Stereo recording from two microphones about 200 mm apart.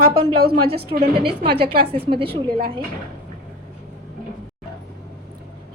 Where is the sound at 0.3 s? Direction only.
50° right (ahead or behind).